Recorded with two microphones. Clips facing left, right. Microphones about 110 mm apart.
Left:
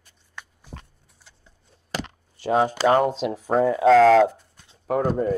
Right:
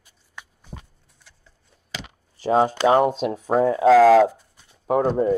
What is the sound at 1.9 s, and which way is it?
Chop, 45° left (ahead or behind).